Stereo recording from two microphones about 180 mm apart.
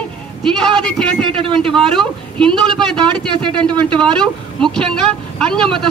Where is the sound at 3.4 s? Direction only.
25° right (ahead or behind).